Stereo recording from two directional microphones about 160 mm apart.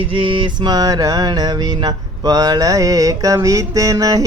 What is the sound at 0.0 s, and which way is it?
Mantra, 35° right (ahead or behind).